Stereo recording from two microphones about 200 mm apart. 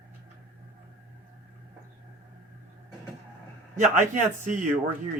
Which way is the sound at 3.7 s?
35° right (ahead or behind).